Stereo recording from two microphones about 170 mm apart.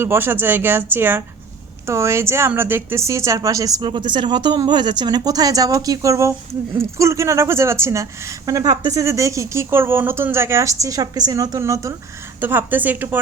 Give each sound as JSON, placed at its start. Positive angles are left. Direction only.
{"t": 0.0, "sound": "a woman's voice", "side_deg": -15}